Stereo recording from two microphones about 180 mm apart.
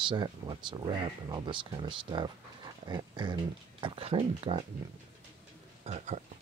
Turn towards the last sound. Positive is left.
turn(degrees=-35)  # may be behind; listen again after turning